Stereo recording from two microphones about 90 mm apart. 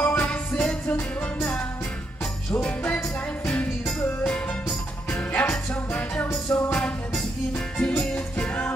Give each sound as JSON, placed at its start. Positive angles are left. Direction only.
{"t": 0.0, "sound": "music", "side_deg": 15}
{"t": 2.5, "sound": "music", "side_deg": 20}